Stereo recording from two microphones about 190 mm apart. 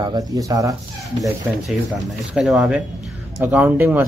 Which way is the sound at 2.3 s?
Centre (ahead or behind).